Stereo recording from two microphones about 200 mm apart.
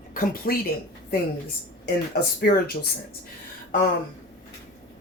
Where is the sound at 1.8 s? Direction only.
50° left (ahead or behind).